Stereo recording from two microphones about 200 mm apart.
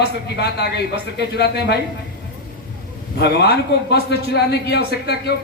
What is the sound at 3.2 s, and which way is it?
A man's voice, 55° left (ahead or behind).